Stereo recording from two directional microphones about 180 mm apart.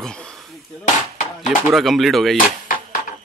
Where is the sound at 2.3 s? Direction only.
50° left (ahead or behind).